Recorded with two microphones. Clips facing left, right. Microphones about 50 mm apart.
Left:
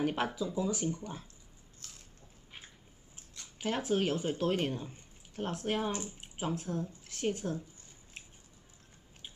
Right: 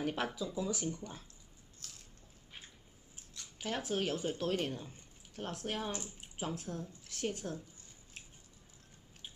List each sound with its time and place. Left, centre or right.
0.0 s speech: centre
1.8 s biting: centre
3.3 s a sound: centre
4.0 s speech: centre
6.0 s speech: centre